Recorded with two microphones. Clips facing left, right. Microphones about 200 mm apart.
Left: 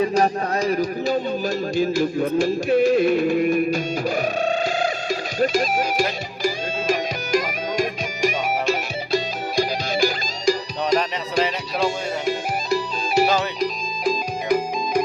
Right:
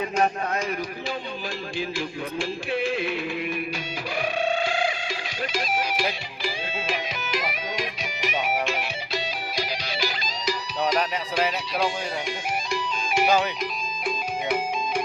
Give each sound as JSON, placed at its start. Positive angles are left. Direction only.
{"t": 0.0, "sound": "speech", "side_deg": 35}
{"t": 1.7, "sound": "music", "side_deg": 40}
{"t": 10.8, "sound": "speech", "side_deg": -10}
{"t": 13.6, "sound": "music", "side_deg": 35}